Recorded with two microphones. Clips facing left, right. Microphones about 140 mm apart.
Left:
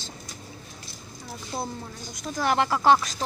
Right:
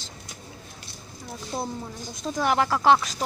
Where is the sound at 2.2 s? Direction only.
20° right (ahead or behind).